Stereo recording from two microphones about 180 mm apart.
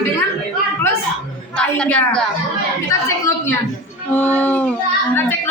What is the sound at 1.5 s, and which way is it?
Speech, 5° left (ahead or behind).